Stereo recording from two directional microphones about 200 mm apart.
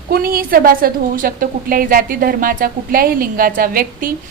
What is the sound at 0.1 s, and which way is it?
A woman's voice, 50° right (ahead or behind).